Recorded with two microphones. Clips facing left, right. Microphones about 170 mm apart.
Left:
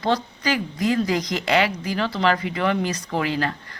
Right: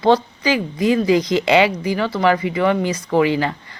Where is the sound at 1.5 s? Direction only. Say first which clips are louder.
Right 4 dB; 15° right (ahead or behind).